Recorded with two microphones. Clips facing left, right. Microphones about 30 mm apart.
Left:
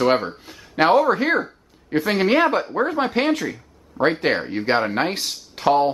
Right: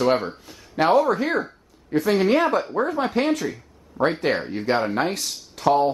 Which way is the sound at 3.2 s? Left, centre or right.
Centre.